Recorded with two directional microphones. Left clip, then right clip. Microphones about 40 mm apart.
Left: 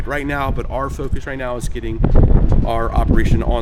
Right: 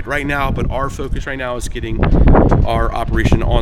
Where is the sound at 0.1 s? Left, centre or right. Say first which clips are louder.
Right 3 dB; centre.